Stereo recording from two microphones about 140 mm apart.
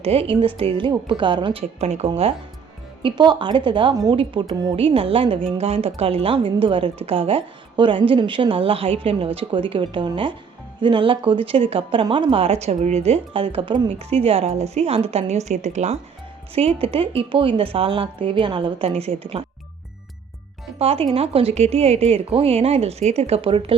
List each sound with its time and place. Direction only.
0.0 s a woman's voice: 45° right (ahead or behind)
1.8 s speech: 50° right (ahead or behind)
3.0 s a woman's voice: 35° right (ahead or behind); by 16.0 s 55° right (ahead or behind)
16.6 s speech: 45° right (ahead or behind)
20.7 s speech: 45° right (ahead or behind)